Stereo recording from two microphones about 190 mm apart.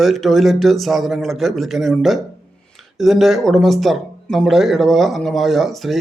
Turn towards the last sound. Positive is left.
turn(degrees=0)  # may be behind; listen again after turning